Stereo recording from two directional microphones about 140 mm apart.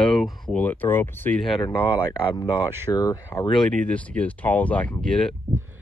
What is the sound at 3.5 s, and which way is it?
Speech, 10° left (ahead or behind).